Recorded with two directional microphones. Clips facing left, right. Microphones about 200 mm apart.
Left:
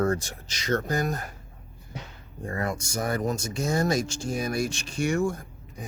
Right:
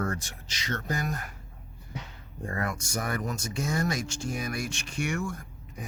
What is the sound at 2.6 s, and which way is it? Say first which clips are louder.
Speech: left 5 dB; 30° left (ahead or behind).